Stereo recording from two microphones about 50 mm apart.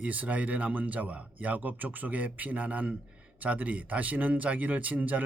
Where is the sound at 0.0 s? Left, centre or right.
Right.